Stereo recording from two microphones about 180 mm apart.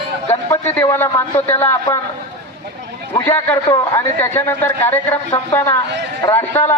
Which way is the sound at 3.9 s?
10° left (ahead or behind).